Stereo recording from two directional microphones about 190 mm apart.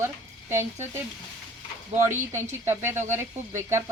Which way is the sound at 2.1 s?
15° right (ahead or behind).